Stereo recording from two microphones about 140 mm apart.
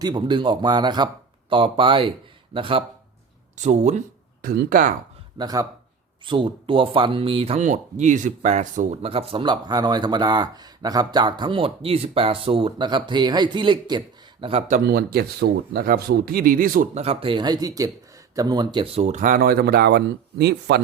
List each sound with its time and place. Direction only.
0.0 s speech: 35° right (ahead or behind)
3.6 s speech: 55° right (ahead or behind)
4.4 s speech: 80° right
5.4 s speech: 25° right (ahead or behind)
7.6 s speech: 60° right (ahead or behind); by 14.0 s 35° right (ahead or behind)
14.7 s a man's voice: 90° right
16.9 s speech: 45° right (ahead or behind); by 19.8 s 90° right